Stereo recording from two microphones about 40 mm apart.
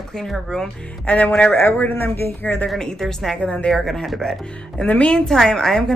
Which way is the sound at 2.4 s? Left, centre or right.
Left.